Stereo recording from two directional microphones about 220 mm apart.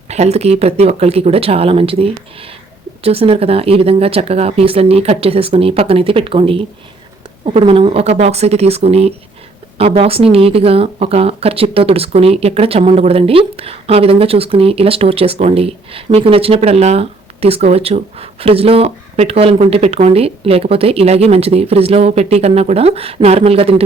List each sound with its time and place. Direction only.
0.1 s speech: 30° right (ahead or behind)